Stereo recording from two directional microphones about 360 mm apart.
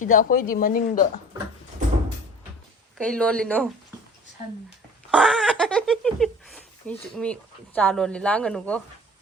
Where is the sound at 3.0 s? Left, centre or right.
Centre.